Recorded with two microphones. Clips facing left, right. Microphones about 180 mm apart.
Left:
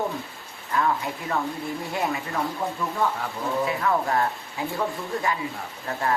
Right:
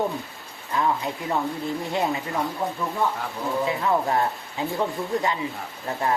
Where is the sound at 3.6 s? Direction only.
20° right (ahead or behind).